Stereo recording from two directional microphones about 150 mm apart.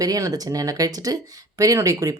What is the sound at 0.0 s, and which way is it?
Speech, 25° right (ahead or behind).